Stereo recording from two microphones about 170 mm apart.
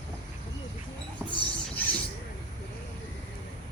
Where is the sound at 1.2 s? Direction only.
15° right (ahead or behind).